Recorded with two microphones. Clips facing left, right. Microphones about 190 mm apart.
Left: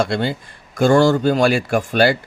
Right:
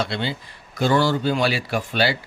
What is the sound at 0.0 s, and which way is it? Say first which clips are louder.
Speech: left 6 dB; 50° left (ahead or behind).